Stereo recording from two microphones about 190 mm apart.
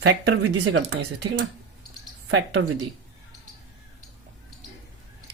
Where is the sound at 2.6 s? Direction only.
90° right.